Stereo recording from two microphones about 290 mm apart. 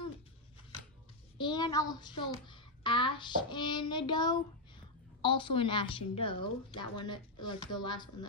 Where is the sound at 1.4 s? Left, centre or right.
Centre.